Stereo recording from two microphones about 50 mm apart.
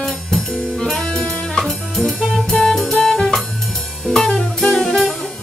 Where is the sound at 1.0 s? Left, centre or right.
Centre.